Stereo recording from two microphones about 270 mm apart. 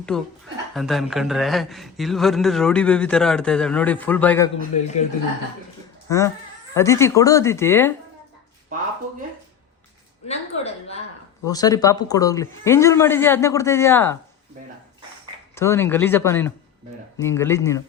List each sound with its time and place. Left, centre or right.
0.1 s speech: centre
6.1 s speech: centre
10.2 s a sound: left
11.4 s speech: centre
15.5 s speech: centre